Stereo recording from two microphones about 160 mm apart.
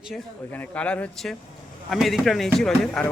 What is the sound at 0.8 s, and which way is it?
Speech, 5° left (ahead or behind).